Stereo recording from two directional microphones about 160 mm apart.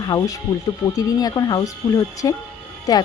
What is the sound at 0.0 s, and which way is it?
Speech, 25° left (ahead or behind).